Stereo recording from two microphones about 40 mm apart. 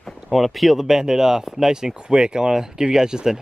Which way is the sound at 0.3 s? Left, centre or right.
Centre.